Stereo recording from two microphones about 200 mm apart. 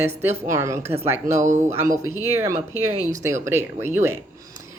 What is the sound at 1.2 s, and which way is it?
Speech, 35° right (ahead or behind).